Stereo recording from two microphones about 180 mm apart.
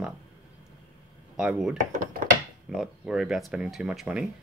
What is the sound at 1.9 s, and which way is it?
Speech, 45° right (ahead or behind).